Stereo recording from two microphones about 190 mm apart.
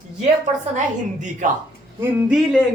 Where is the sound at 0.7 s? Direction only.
40° right (ahead or behind).